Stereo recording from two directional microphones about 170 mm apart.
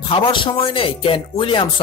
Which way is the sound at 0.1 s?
30° left (ahead or behind).